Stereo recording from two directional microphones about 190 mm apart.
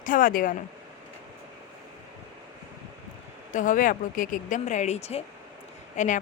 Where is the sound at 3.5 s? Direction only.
45° left (ahead or behind).